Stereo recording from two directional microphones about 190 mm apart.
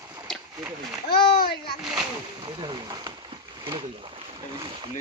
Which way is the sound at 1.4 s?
55° left (ahead or behind).